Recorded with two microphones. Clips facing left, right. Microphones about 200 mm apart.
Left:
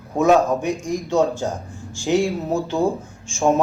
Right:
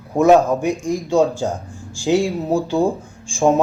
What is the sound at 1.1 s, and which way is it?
A man's voice, 15° right (ahead or behind).